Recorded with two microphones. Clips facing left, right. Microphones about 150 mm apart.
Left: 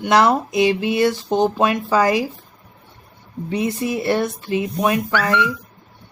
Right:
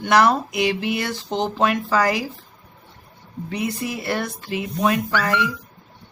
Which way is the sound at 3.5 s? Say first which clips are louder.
Left 5 dB; 25° left (ahead or behind).